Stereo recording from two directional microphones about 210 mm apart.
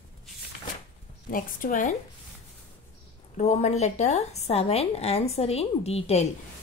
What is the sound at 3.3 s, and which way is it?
Speech, 30° left (ahead or behind).